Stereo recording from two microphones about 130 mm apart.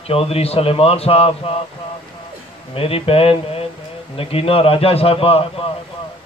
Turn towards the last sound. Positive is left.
turn(degrees=45)  # may be behind; listen again after turning